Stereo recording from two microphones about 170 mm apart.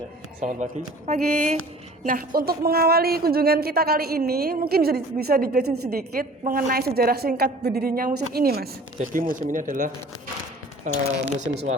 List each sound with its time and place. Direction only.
0.4 s speech: 45° right (ahead or behind)
2.0 s speech: 55° right (ahead or behind)
9.0 s speech: 50° right (ahead or behind)